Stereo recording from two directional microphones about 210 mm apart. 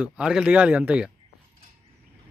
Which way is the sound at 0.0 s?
5° right (ahead or behind).